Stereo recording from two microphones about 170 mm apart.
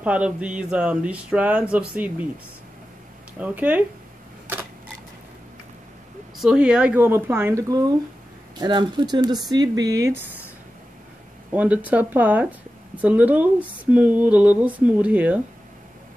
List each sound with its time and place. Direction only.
0.0 s speech: 10° right (ahead or behind)
3.3 s speech: 10° right (ahead or behind)
6.3 s speech: 5° right (ahead or behind)
11.5 s speech: 10° right (ahead or behind)